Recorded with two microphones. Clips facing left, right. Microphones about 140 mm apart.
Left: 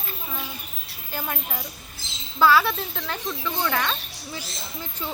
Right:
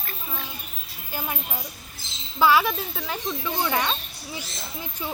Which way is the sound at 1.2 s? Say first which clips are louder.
Left 1 dB; 10° right (ahead or behind).